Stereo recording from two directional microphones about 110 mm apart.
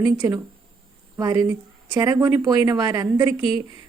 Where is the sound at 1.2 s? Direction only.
35° right (ahead or behind).